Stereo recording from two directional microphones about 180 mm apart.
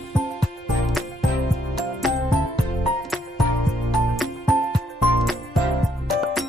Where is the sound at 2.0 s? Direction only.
Centre (ahead or behind).